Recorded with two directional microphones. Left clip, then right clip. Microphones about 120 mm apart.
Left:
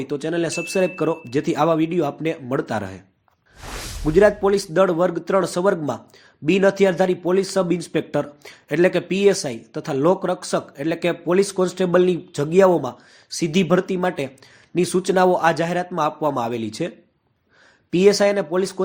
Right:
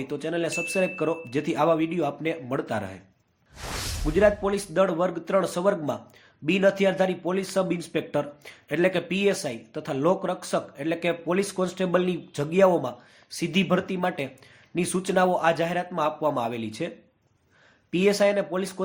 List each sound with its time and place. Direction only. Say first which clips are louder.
0.0 s speech: left 5 dB; 40° left (ahead or behind)
4.0 s speech: left 6 dB; 45° left (ahead or behind)
17.9 s speech: left 6 dB; 45° left (ahead or behind)